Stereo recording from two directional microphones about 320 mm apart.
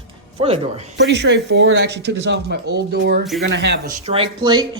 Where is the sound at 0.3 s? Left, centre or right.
Centre.